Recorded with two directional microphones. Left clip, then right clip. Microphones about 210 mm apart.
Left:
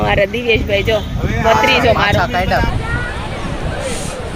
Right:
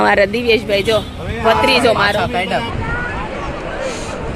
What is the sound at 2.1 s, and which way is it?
Speech, centre (ahead or behind).